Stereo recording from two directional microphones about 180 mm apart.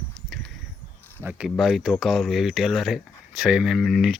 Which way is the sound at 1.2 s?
5° right (ahead or behind).